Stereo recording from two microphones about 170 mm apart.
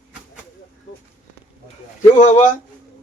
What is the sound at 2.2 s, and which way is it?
Speech, 45° left (ahead or behind).